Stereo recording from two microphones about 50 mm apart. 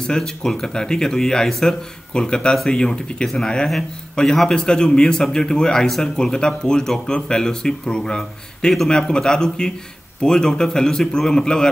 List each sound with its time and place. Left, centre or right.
0.0 s a man's voice: centre